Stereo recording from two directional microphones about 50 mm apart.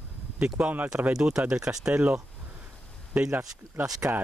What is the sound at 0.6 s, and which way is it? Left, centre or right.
Speech, right.